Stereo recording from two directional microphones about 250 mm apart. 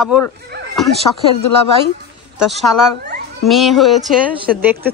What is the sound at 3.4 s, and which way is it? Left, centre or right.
Speech, centre.